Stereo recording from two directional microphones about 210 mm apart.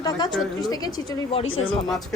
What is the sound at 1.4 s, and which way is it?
Speech, 70° left (ahead or behind).